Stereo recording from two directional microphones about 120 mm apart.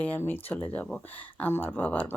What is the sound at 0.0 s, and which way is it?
Speech, 15° left (ahead or behind).